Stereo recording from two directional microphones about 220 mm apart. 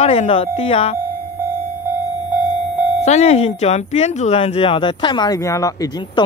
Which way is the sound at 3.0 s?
30° left (ahead or behind).